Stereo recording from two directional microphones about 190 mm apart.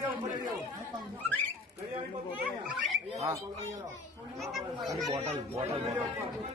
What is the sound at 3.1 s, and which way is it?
Speech, 15° right (ahead or behind).